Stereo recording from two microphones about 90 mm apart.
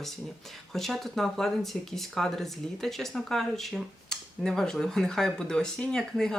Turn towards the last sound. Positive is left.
turn(degrees=5)  # may be behind; listen again after turning